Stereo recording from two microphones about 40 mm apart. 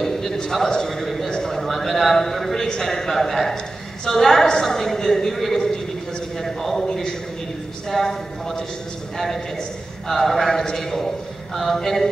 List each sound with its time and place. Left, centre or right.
0.0 s a sound: centre
0.7 s a man's voice: centre
1.3 s a sound: centre
2.7 s a man's voice: centre
10.0 s a man's voice: centre
10.5 s a man's voice: centre